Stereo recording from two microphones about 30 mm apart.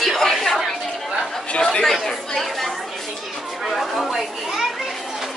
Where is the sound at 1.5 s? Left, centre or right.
Left.